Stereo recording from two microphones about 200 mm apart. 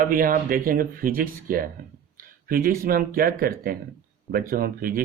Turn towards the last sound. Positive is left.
turn(degrees=-45)  # may be behind; listen again after turning